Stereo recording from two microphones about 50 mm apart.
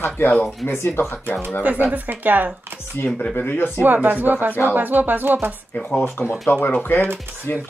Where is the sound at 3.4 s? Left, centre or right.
Left.